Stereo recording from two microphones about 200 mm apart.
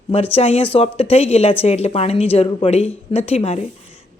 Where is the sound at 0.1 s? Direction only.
30° left (ahead or behind).